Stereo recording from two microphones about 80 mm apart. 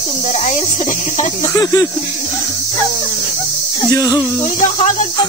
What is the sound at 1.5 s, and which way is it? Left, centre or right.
Speech, left.